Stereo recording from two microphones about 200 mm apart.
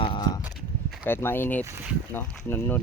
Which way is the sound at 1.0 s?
10° left (ahead or behind).